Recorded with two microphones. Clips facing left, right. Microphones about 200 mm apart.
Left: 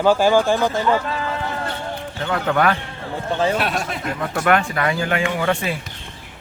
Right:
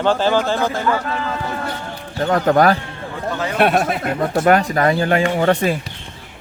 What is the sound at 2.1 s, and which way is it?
Speech, 40° right (ahead or behind).